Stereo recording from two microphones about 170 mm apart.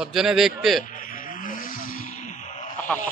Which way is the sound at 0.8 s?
50° left (ahead or behind).